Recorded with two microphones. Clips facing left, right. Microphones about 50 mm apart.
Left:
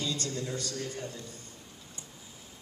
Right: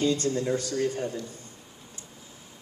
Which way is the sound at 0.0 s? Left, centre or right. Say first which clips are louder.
Right 9 dB; right.